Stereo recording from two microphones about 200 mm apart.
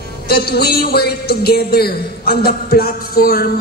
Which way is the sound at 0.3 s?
50° left (ahead or behind).